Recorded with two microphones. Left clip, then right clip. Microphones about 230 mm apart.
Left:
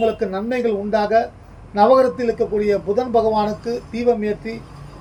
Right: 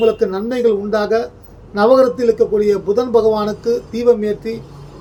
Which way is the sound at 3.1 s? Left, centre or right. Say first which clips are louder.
Right 2 dB; centre.